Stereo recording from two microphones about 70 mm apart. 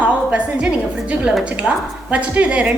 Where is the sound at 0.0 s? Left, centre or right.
Centre.